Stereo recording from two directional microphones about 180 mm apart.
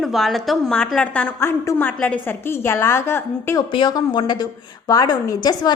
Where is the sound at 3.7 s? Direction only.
25° left (ahead or behind).